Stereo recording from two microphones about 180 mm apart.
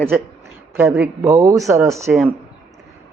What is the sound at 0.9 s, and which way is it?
Speech, 5° right (ahead or behind).